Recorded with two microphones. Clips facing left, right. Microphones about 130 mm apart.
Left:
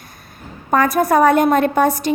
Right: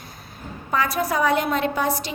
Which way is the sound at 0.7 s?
50° left (ahead or behind).